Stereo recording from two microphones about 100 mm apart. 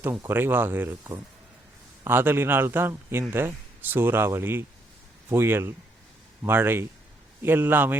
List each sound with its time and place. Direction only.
0.0 s a man's voice: 20° right (ahead or behind)